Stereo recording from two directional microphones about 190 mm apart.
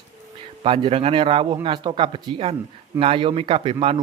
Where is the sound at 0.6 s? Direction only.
30° right (ahead or behind).